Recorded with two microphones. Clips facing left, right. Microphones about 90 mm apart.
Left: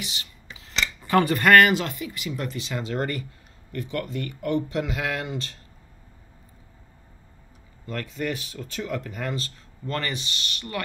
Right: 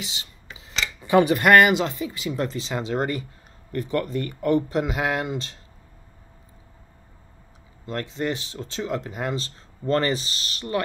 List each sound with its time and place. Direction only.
0.0 s speech: 25° right (ahead or behind)
3.7 s speech: 40° right (ahead or behind)
4.8 s speech: 25° right (ahead or behind)
7.8 s speech: 25° right (ahead or behind)